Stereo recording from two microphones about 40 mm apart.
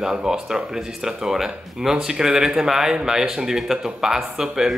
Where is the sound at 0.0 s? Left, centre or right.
Centre.